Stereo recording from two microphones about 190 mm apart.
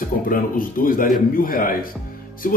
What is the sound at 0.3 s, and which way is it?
Speech, 45° left (ahead or behind).